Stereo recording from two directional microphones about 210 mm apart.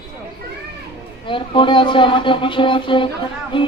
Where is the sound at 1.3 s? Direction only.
25° left (ahead or behind).